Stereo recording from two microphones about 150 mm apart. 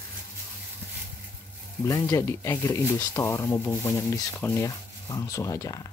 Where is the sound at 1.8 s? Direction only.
20° left (ahead or behind).